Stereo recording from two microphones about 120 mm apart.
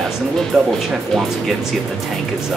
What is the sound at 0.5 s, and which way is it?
Speech, 5° right (ahead or behind).